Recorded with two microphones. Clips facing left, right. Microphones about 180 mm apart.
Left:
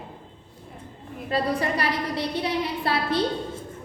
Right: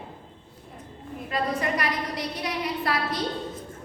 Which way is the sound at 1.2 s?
35° left (ahead or behind).